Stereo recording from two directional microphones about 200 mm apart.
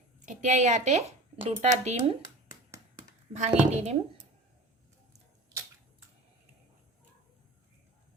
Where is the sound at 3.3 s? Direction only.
35° right (ahead or behind).